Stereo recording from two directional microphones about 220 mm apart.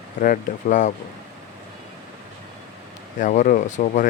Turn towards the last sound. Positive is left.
turn(degrees=35)  # may be behind; listen again after turning